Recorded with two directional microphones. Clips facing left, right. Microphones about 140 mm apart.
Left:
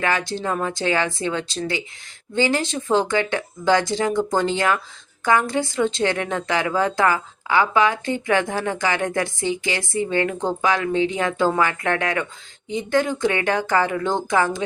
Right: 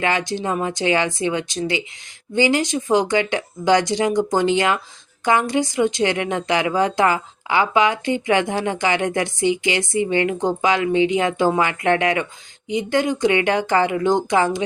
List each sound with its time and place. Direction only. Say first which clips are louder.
0.0 s speech: right 2 dB; 20° right (ahead or behind)